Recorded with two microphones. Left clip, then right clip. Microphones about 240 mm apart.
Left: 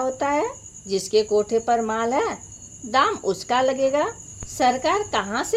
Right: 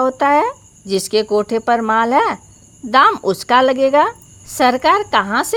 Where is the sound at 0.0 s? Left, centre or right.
Right.